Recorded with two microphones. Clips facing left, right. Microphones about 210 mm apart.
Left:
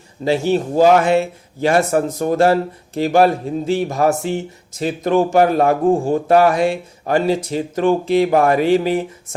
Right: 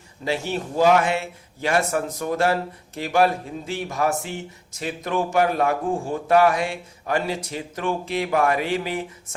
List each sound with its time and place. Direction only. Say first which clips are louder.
0.3 s speech: left 9 dB; 35° left (ahead or behind)